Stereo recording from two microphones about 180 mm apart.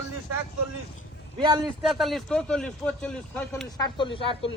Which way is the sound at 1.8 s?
Centre (ahead or behind).